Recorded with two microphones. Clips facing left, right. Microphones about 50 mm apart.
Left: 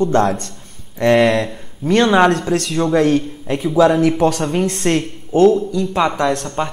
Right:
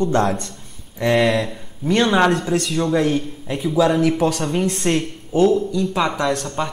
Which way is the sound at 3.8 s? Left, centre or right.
Centre.